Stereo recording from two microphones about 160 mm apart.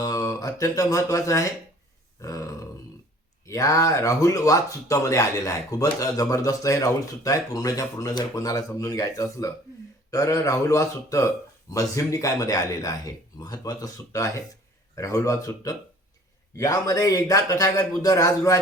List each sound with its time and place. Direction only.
0.0 s speech: 20° left (ahead or behind)
2.2 s grunt: 20° left (ahead or behind)
3.4 s speech: 20° left (ahead or behind)